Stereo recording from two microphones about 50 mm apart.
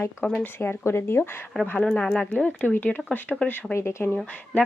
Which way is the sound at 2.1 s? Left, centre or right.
Left.